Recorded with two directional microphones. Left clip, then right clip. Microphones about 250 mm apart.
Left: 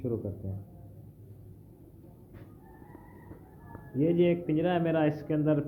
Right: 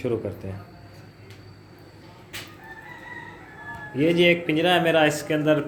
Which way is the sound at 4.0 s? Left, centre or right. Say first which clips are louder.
Right 7 dB; centre.